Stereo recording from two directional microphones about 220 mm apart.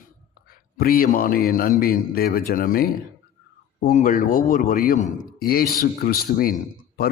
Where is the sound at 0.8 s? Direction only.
40° left (ahead or behind).